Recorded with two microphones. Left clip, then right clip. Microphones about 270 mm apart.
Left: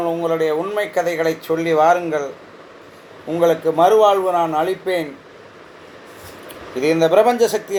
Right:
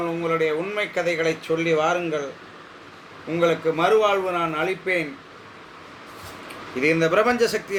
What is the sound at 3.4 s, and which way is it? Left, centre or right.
Speech, centre.